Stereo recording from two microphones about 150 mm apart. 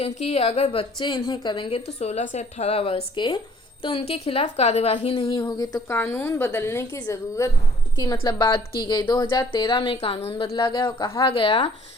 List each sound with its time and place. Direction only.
0.0 s a woman's voice: 40° left (ahead or behind)
2.0 s a woman's voice: 45° left (ahead or behind); by 6.0 s 25° left (ahead or behind)
6.0 s a woman's voice: 15° left (ahead or behind); by 10.5 s 40° left (ahead or behind)
10.5 s a woman's voice: 30° left (ahead or behind)